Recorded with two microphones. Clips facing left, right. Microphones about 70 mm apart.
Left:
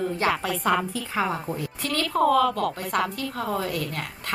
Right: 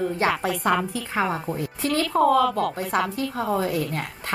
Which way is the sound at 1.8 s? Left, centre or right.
Centre.